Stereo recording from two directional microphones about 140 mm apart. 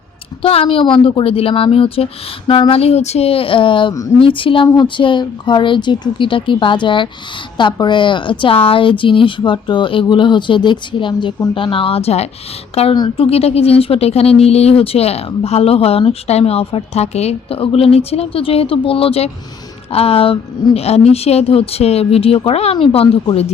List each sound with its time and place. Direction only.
0.4 s speech: 40° left (ahead or behind)